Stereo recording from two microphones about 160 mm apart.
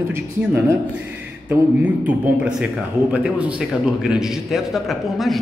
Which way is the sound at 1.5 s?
10° right (ahead or behind).